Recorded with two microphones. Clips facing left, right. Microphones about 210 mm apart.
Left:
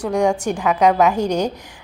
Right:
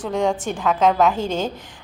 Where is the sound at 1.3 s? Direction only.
45° left (ahead or behind).